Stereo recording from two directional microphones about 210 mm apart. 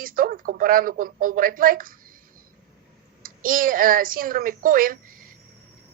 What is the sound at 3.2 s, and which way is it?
A woman's voice, 40° right (ahead or behind).